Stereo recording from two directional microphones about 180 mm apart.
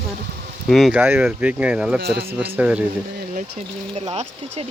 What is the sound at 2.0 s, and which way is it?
Speech, 65° right (ahead or behind).